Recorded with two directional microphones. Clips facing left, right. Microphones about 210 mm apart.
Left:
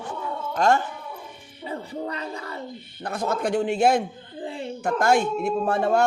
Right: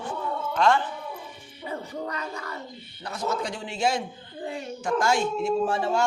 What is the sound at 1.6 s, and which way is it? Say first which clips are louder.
Music: left 2 dB; 30° left (ahead or behind).